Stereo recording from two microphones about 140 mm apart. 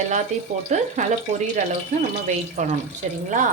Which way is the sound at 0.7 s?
55° right (ahead or behind).